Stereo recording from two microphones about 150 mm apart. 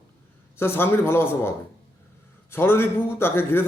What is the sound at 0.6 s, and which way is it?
A man's voice, 15° left (ahead or behind).